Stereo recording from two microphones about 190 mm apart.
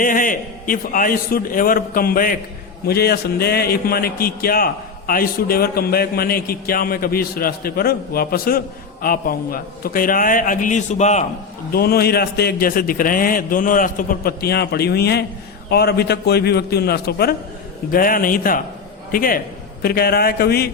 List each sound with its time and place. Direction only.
0.0 s a man's voice: 45° left (ahead or behind)
11.7 s a man's voice: 55° left (ahead or behind)